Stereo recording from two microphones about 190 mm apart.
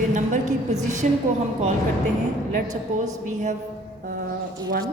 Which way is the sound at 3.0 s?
40° right (ahead or behind).